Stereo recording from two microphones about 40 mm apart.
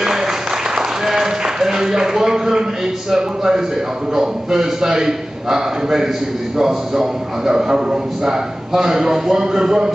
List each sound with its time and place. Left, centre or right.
0.0 s applause: centre
0.7 s a sound: centre
3.1 s a man's voice: centre